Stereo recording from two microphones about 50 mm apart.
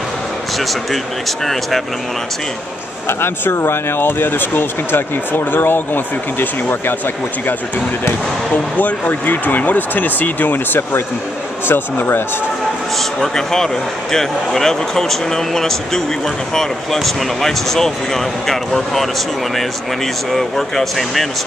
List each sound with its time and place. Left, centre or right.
1.4 s speech: centre
3.1 s speech: left
8.7 s speech: left
13.2 s speech: centre
20.3 s speech: centre